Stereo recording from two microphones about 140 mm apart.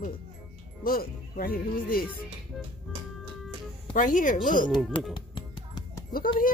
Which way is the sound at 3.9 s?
70° left (ahead or behind).